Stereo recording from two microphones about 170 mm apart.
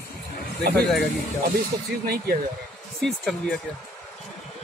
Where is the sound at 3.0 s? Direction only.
Centre (ahead or behind).